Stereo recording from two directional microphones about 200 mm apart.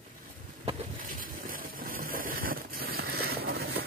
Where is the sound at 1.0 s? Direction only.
45° right (ahead or behind).